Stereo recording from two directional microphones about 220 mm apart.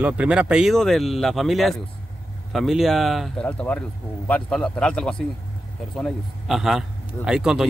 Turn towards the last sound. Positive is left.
turn(degrees=-5)  # may be behind; listen again after turning